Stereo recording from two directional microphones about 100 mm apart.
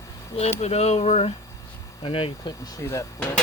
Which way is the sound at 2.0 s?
60° left (ahead or behind).